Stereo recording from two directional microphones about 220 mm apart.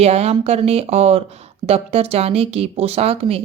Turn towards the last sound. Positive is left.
turn(degrees=-25)  # may be behind; listen again after turning